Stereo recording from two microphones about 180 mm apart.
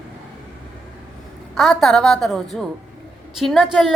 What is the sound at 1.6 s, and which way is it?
A woman's voice, centre (ahead or behind).